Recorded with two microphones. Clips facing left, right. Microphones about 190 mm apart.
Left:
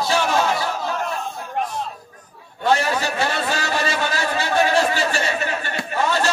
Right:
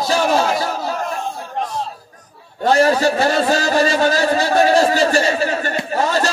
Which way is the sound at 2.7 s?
40° right (ahead or behind).